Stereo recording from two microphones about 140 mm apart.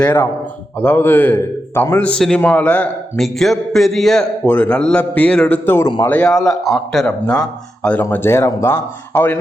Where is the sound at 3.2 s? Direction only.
Centre (ahead or behind); by 6.1 s 20° left (ahead or behind).